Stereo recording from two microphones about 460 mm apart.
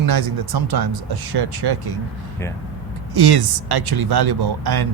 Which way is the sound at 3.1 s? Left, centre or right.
Right.